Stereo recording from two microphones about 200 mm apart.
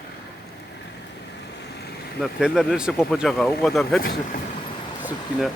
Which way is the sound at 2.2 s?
Centre (ahead or behind).